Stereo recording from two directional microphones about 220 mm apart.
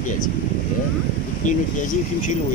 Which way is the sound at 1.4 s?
35° left (ahead or behind).